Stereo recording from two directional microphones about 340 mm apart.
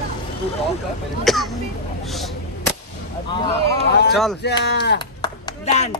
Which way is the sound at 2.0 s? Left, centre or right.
Centre.